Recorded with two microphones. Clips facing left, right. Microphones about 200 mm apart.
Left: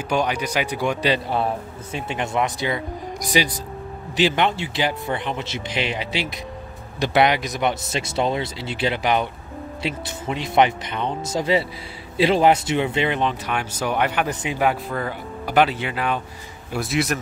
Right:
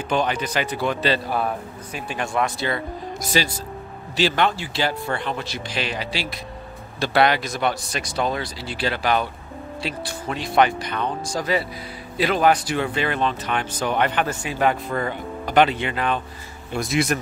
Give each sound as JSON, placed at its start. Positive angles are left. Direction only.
{"t": 0.1, "sound": "speech", "side_deg": 10}
{"t": 1.3, "sound": "a man's voice", "side_deg": 25}
{"t": 14.7, "sound": "speech", "side_deg": 5}